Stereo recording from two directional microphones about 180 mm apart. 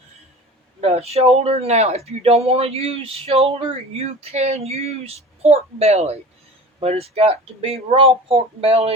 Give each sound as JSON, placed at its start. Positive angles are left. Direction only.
{"t": 0.8, "sound": "speech", "side_deg": -35}